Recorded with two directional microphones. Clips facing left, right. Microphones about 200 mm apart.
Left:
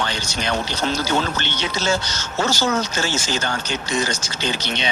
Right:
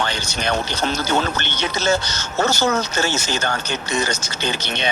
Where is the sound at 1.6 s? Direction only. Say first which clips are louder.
Right 3 dB; 60° right (ahead or behind).